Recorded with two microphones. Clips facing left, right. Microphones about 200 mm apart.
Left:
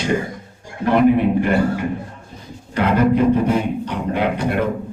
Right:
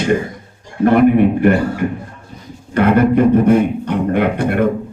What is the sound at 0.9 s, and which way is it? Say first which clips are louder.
Speech: right 3 dB; 55° right (ahead or behind).